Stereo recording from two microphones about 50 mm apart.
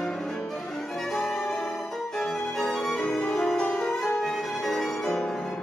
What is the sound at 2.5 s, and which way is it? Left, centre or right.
Violin, centre.